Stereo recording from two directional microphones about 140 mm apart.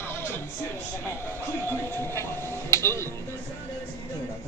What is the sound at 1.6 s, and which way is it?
Music, 15° left (ahead or behind).